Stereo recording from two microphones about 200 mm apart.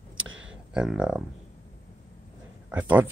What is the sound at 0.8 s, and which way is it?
Speech, 5° right (ahead or behind).